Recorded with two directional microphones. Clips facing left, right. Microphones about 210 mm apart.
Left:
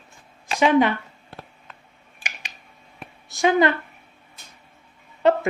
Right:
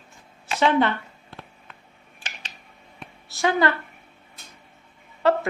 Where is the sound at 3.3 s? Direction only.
20° left (ahead or behind).